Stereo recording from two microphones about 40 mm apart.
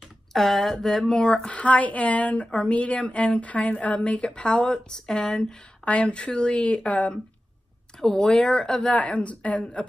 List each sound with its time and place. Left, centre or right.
0.3 s speech: centre
1.1 s speech: centre
1.5 s a woman's voice: left
8.0 s speech: centre
8.9 s a woman's voice: left